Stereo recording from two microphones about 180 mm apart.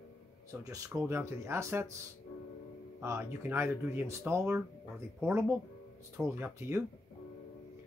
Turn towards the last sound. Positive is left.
turn(degrees=-15)  # may be behind; listen again after turning